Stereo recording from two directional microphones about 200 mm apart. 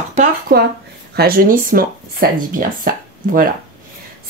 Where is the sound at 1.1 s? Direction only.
50° right (ahead or behind).